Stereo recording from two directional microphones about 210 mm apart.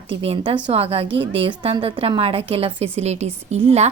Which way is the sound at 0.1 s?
25° right (ahead or behind).